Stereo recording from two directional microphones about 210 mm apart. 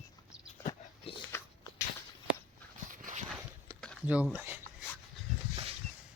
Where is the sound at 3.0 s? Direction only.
35° right (ahead or behind).